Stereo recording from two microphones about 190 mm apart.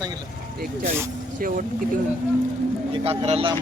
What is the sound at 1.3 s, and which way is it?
Speech, 45° right (ahead or behind).